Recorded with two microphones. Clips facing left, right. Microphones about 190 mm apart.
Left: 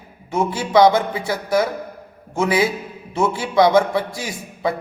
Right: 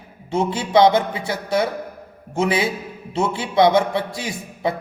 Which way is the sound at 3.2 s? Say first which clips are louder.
Left 1 dB; 25° right (ahead or behind).